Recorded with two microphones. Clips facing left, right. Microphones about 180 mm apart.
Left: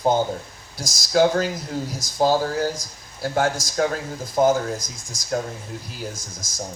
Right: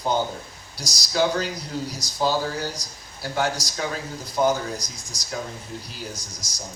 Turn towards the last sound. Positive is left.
turn(degrees=50)  # may be behind; listen again after turning